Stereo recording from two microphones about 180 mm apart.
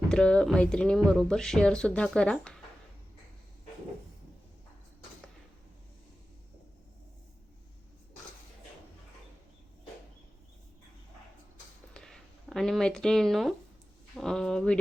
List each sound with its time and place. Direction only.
0.1 s speech: 5° left (ahead or behind)
11.9 s a sound: 5° left (ahead or behind)
14.2 s speech: 5° left (ahead or behind)